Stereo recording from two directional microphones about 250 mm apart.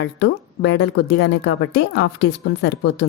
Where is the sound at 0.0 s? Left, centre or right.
Left.